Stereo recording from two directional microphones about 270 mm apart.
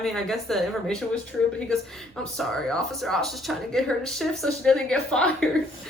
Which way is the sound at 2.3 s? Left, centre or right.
Centre.